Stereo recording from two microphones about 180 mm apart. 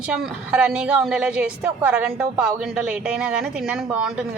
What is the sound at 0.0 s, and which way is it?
A woman's voice, 5° right (ahead or behind).